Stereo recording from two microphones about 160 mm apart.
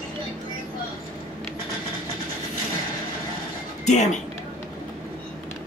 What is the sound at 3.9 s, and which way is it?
Speech, 45° left (ahead or behind).